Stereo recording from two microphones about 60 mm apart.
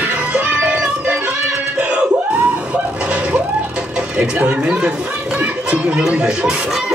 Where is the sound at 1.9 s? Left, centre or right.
Centre.